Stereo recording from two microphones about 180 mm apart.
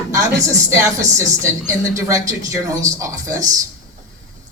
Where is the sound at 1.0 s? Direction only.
15° right (ahead or behind).